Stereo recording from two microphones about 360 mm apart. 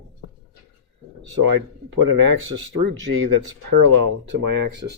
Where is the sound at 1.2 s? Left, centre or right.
Right.